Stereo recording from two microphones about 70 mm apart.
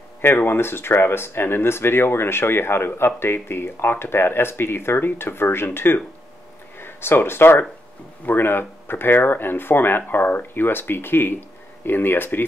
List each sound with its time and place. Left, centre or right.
0.2 s speech: left